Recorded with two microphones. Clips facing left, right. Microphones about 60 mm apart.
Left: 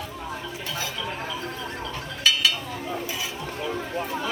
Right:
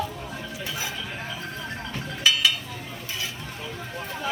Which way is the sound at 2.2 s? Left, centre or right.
Centre.